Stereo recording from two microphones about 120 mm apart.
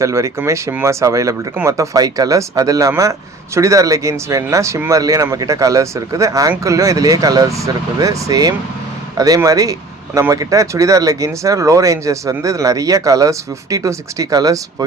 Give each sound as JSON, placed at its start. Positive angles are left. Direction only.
{"t": 0.0, "sound": "speech", "side_deg": -25}